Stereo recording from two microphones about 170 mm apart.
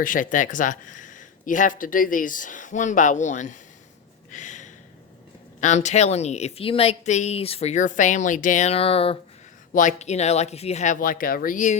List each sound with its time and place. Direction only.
0.0 s speech: 50° left (ahead or behind)
4.3 s a sound: 45° left (ahead or behind)
5.5 s a woman's voice: 45° left (ahead or behind)
9.7 s speech: 45° left (ahead or behind)